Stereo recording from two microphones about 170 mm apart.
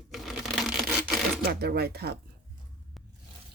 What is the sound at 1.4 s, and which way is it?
Speech, 70° right (ahead or behind).